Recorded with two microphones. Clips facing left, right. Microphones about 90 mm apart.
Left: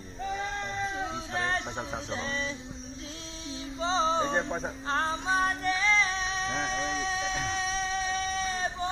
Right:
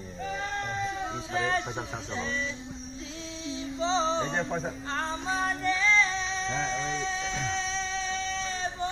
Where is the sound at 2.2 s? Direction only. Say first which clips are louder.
Right 3 dB; 50° left (ahead or behind).